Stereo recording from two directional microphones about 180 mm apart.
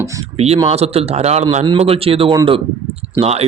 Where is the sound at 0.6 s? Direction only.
35° right (ahead or behind).